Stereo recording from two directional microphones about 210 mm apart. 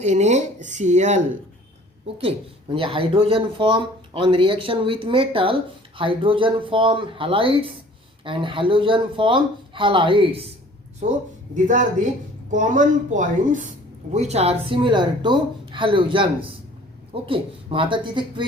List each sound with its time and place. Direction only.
0.0 s speech: 35° right (ahead or behind)
2.7 s speech: 25° right (ahead or behind)
11.5 s speech: 35° right (ahead or behind)